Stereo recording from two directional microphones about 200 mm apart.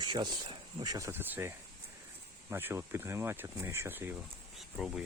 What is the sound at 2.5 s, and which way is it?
Speech, 10° right (ahead or behind).